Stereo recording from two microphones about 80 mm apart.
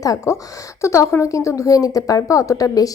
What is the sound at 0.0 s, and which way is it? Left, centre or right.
A woman's voice, left.